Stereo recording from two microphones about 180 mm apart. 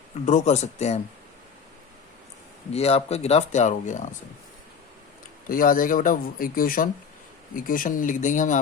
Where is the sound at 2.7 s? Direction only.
35° left (ahead or behind).